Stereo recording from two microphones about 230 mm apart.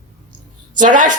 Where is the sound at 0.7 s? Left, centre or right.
Right.